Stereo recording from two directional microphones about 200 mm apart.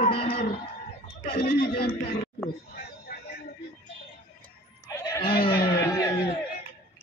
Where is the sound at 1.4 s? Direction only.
50° left (ahead or behind).